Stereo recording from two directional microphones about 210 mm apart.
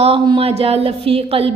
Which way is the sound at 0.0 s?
25° right (ahead or behind).